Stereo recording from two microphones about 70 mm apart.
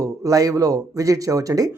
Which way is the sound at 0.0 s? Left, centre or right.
Right.